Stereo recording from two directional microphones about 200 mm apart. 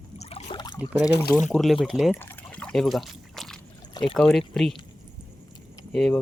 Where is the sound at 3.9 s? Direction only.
20° left (ahead or behind).